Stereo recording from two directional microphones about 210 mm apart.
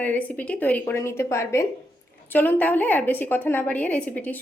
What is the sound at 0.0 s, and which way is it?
A woman's voice, 5° left (ahead or behind).